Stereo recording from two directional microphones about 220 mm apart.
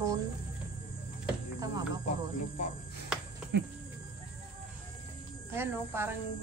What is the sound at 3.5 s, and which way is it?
Speech, 50° right (ahead or behind).